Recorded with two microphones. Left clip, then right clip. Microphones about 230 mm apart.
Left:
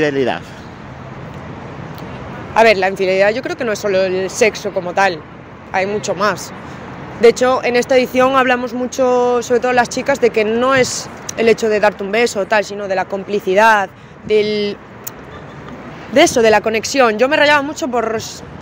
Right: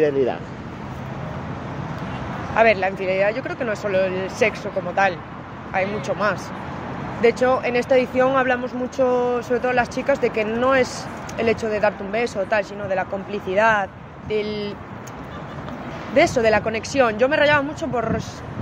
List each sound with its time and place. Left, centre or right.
0.0 s speech: left
2.5 s speech: left
16.2 s speech: left